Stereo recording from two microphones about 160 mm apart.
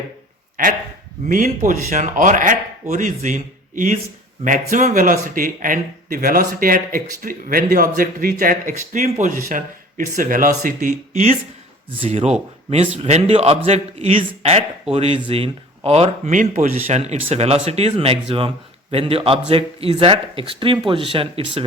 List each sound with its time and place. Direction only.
0.6 s speech: 60° right (ahead or behind)
11.9 s speech: 40° right (ahead or behind)
16.3 s speech: 55° right (ahead or behind)
16.8 s speech: 45° right (ahead or behind)